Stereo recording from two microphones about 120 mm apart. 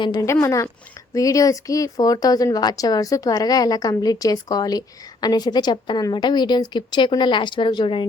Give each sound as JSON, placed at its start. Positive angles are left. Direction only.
{"t": 0.4, "sound": "speech", "side_deg": 25}